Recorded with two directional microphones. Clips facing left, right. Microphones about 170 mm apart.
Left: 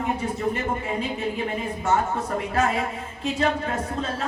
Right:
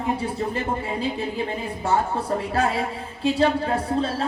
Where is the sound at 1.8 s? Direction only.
30° right (ahead or behind).